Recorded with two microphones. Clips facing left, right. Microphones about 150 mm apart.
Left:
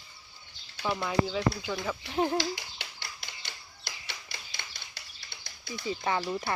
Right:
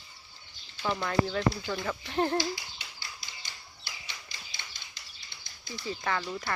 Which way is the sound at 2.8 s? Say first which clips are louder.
Left 2 dB; 65° left (ahead or behind).